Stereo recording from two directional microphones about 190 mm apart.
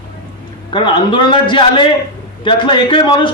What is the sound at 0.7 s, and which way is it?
A man's voice, 25° left (ahead or behind).